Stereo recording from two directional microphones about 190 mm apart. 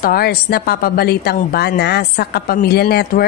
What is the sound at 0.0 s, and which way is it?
A woman's voice, 55° left (ahead or behind).